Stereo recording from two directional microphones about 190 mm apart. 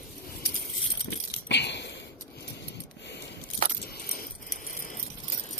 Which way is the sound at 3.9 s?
50° left (ahead or behind).